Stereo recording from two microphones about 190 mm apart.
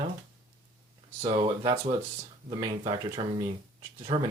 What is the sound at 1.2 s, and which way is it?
Speech, 30° right (ahead or behind).